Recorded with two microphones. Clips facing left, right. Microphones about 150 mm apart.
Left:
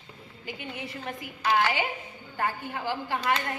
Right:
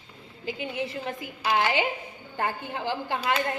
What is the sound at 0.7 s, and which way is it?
A woman's voice, 25° right (ahead or behind).